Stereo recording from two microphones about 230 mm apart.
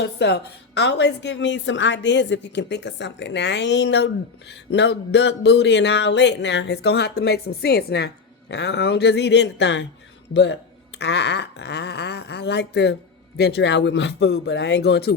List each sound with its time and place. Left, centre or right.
0.0 s a woman's voice: left